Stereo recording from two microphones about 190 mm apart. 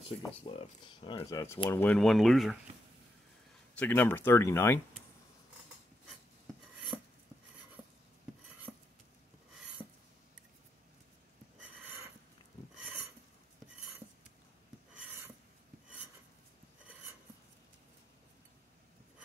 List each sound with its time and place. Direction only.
0.5 s speech: 35° left (ahead or behind)
1.0 s speech: 20° left (ahead or behind); by 2.5 s centre (ahead or behind)
3.7 s speech: 10° left (ahead or behind)
6.9 s chopping: 5° right (ahead or behind)
8.7 s cutlery: 10° right (ahead or behind)